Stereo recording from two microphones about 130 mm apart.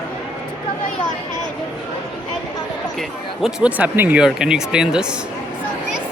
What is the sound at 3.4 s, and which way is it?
Speech, 10° right (ahead or behind).